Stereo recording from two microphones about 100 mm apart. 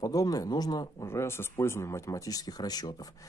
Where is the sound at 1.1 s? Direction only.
25° left (ahead or behind).